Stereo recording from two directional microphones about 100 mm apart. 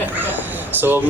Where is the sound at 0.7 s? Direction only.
20° right (ahead or behind).